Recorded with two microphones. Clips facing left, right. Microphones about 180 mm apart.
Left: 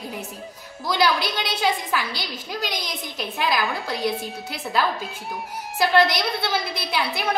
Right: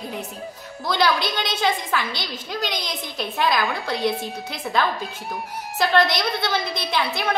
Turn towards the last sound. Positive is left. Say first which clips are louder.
# right 1 dB
turn(degrees=5)  # may be behind; listen again after turning